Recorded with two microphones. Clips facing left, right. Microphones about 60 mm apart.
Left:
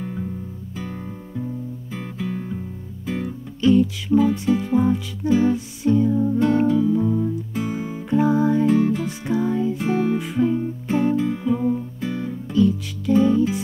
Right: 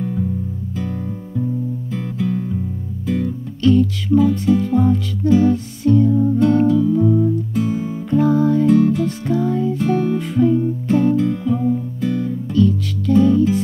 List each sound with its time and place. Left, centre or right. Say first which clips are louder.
0.7 s music: right 5 dB; centre
7.5 s music: right 5 dB; centre